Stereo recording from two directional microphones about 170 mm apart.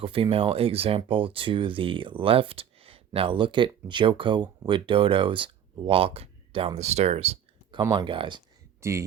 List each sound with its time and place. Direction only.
0.0 s speech: 30° right (ahead or behind)
7.8 s speech: 25° right (ahead or behind)
8.8 s speech: 15° right (ahead or behind)